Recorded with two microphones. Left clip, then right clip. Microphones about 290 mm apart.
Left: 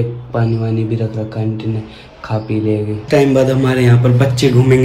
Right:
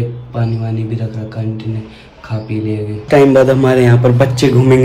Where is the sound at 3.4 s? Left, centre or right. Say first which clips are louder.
Right 4 dB; centre.